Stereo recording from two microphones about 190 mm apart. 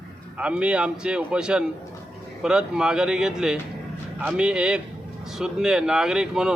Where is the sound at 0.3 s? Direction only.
5° right (ahead or behind).